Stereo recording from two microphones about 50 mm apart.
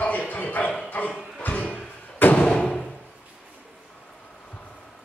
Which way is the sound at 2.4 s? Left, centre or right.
Centre.